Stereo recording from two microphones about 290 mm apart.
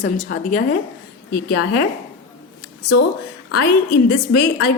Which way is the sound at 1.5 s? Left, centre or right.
Left.